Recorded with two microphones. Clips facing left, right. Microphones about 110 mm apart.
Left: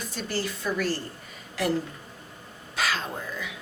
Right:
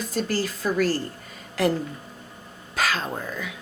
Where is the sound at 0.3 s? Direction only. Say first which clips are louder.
Right 3 dB; 40° right (ahead or behind).